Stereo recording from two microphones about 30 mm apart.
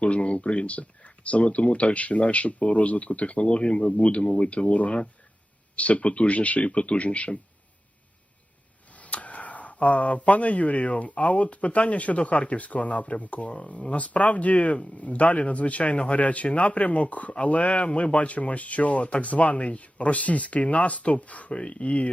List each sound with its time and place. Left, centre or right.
0.0 s speech: left
6.7 s speech: left
9.0 s speech: left
21.5 s speech: left